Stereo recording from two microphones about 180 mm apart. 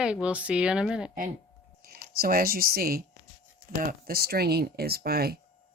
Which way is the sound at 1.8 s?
55° right (ahead or behind).